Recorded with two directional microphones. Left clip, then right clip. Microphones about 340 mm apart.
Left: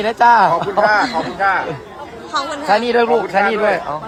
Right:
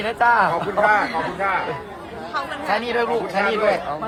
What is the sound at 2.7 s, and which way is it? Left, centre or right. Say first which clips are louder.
Speech: left 8 dB; left.